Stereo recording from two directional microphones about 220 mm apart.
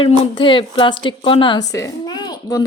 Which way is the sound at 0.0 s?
25° left (ahead or behind).